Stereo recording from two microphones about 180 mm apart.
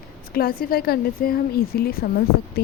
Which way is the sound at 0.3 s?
55° left (ahead or behind).